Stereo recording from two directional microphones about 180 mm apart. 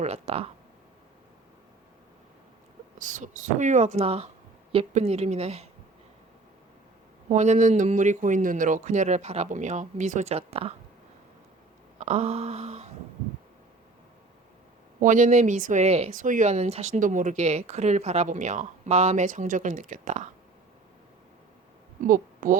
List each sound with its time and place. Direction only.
0.0 s speech: 35° right (ahead or behind)
3.0 s speech: 45° right (ahead or behind)
7.3 s speech: 40° right (ahead or behind)
11.9 s speech: 35° right (ahead or behind)
15.0 s speech: 45° right (ahead or behind)
22.0 s a woman's voice: 50° right (ahead or behind)